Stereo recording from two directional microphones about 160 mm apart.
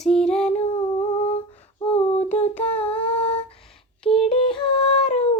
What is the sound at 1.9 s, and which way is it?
Female singing, 40° left (ahead or behind).